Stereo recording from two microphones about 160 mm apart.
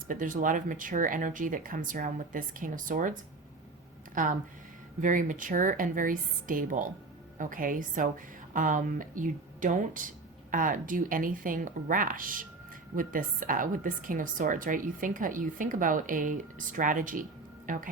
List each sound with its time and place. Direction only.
0.1 s a woman's voice: 55° right (ahead or behind)